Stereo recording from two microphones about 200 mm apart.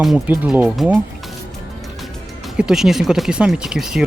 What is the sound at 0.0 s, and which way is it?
Speech, centre (ahead or behind).